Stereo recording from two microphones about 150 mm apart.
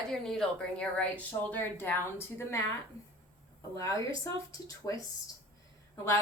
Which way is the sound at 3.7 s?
20° left (ahead or behind).